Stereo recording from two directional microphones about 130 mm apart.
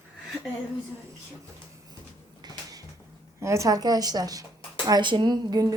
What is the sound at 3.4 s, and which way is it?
A woman's voice, 25° right (ahead or behind).